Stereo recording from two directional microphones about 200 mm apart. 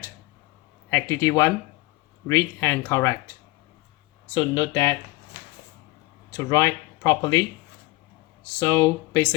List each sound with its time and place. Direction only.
0.9 s speech: 15° left (ahead or behind)
4.4 s speech: 20° left (ahead or behind)
6.3 s speech: 15° left (ahead or behind)
8.5 s speech: 15° left (ahead or behind)